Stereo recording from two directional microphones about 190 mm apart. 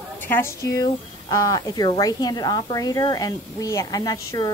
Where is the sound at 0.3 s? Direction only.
15° left (ahead or behind).